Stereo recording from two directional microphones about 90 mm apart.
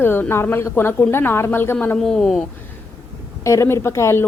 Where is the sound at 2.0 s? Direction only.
5° left (ahead or behind).